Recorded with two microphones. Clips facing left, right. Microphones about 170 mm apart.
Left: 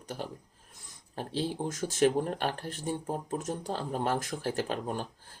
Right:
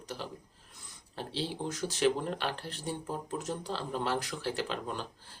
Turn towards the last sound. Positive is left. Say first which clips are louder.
# left 3 dB
turn(degrees=45)  # may be behind; listen again after turning